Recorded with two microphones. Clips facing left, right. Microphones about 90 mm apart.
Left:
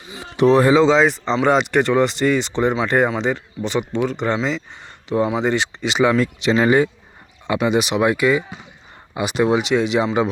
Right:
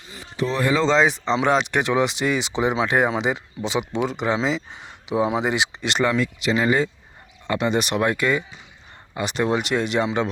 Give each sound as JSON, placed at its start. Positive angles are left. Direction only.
{"t": 0.2, "sound": "a sound", "side_deg": 60}
{"t": 0.7, "sound": "speech", "side_deg": 15}
{"t": 0.9, "sound": "speech", "side_deg": 0}
{"t": 6.4, "sound": "speech", "side_deg": 25}
{"t": 7.4, "sound": "speech", "side_deg": 10}